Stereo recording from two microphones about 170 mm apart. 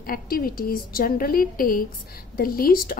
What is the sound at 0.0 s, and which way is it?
A woman's voice, 60° left (ahead or behind).